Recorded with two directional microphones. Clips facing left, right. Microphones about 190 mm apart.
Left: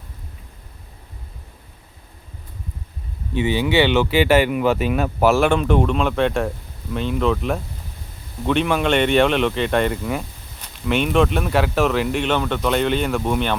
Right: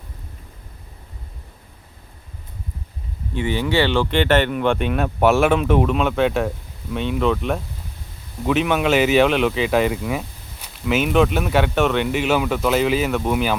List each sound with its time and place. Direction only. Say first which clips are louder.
3.7 s speech: left 1 dB; 20° left (ahead or behind)
4.0 s speech: left 2 dB; 5° left (ahead or behind)